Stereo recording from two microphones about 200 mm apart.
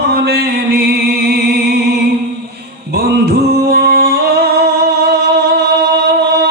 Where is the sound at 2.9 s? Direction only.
50° right (ahead or behind).